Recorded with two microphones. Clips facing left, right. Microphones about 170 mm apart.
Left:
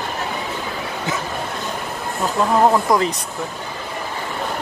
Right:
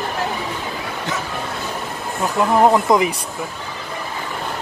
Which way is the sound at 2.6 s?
15° right (ahead or behind).